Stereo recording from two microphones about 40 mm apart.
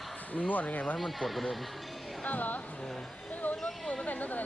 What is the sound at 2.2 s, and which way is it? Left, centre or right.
Speech, left.